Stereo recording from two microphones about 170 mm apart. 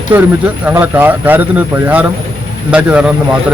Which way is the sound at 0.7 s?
10° right (ahead or behind).